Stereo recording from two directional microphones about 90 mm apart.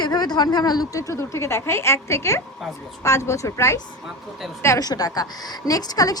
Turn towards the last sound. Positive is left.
turn(degrees=45)  # may be behind; listen again after turning